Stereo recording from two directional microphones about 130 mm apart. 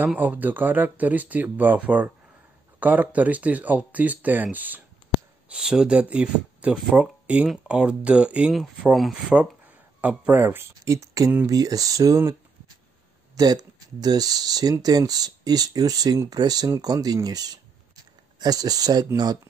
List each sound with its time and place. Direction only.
0.0 s speech: 15° right (ahead or behind); by 19.0 s 30° right (ahead or behind)